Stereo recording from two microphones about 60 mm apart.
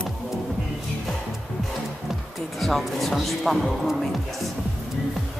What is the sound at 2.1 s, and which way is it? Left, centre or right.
Speech, centre.